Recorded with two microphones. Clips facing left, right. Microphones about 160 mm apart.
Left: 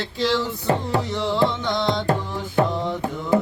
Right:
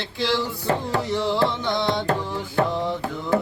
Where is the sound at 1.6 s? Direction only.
5° right (ahead or behind).